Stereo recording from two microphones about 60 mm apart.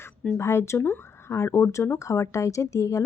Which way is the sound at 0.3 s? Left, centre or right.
Left.